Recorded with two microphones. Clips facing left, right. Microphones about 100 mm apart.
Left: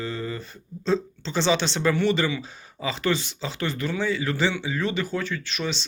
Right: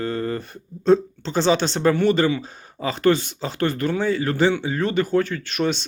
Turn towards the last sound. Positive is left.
turn(degrees=-50)  # may be behind; listen again after turning